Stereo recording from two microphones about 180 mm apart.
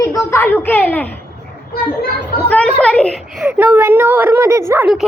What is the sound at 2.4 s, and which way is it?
Speech, 5° left (ahead or behind).